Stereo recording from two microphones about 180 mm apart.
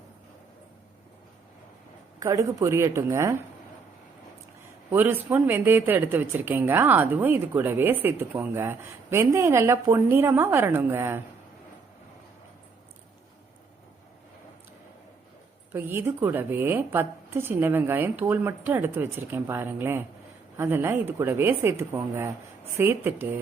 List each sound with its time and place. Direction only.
2.1 s a woman's voice: 15° right (ahead or behind)
4.9 s a woman's voice: 10° right (ahead or behind)
15.7 s a woman's voice: 10° right (ahead or behind)